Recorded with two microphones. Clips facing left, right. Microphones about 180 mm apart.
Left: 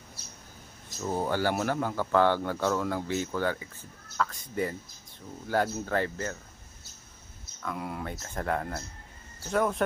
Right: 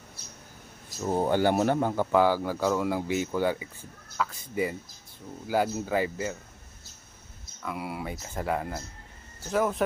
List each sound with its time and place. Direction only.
1.0 s speech: 20° right (ahead or behind)
2.1 s speech: 5° right (ahead or behind)
7.6 s speech: 5° right (ahead or behind)